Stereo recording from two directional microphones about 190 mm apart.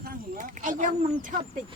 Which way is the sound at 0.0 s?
45° right (ahead or behind).